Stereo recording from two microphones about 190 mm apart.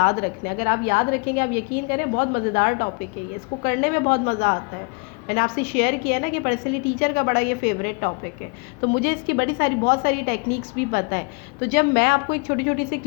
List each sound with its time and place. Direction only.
0.0 s a woman's voice: 50° left (ahead or behind)